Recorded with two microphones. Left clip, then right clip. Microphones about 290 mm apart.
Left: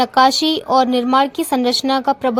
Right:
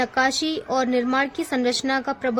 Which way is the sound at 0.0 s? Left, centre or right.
Centre.